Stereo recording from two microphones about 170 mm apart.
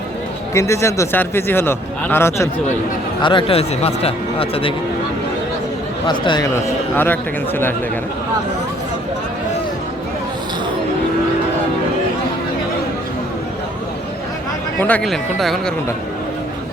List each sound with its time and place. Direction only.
0.5 s speech: 15° left (ahead or behind)
3.2 s speech: 30° left (ahead or behind)
6.1 s speech: 25° left (ahead or behind)
14.8 s speech: 10° left (ahead or behind)